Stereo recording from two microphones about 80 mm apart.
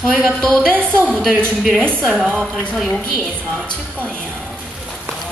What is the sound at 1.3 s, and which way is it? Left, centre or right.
Speech, right.